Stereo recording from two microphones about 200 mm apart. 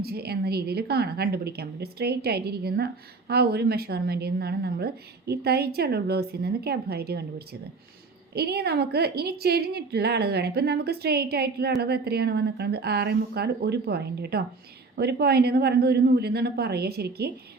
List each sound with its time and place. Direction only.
0.0 s a woman's voice: 50° right (ahead or behind)